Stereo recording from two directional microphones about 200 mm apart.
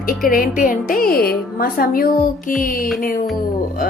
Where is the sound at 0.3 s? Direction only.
45° left (ahead or behind).